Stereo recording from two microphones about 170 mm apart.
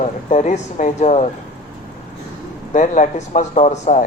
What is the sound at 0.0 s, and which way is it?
Speech, 45° left (ahead or behind).